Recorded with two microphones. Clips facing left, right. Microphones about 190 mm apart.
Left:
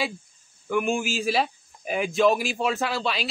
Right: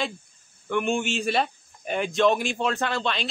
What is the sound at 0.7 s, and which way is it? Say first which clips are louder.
Speech: even; 5° left (ahead or behind).